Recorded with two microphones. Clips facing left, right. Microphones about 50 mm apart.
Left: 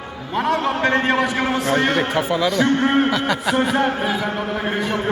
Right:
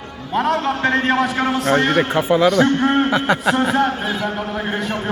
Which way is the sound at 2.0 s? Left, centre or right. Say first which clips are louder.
Right 4 dB; centre.